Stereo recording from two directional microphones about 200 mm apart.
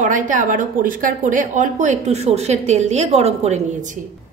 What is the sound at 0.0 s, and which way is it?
A woman's voice, 40° right (ahead or behind).